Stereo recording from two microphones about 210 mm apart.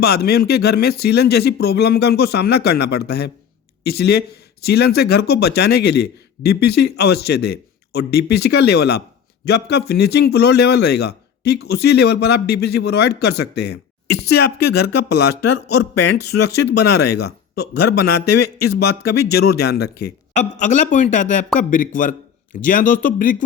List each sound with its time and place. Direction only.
0.0 s speech: 50° left (ahead or behind)
20.3 s speech: 35° left (ahead or behind)